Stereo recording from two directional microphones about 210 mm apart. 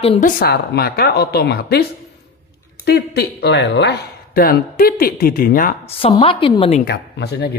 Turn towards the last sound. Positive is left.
turn(degrees=50)  # may be behind; listen again after turning